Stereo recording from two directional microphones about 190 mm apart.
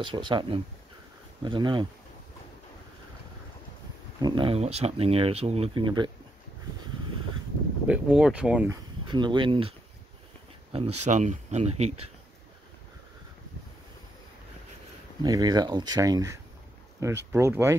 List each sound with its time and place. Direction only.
0.0 s speech: 25° right (ahead or behind)
4.2 s speech: 30° right (ahead or behind)
7.8 s speech: 5° right (ahead or behind)
9.0 s speech: 25° right (ahead or behind)
15.2 s speech: 20° right (ahead or behind)